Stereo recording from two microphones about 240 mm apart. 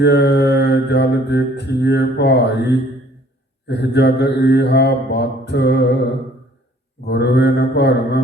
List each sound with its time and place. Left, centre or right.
0.0 s mantra: left
7.0 s mantra: left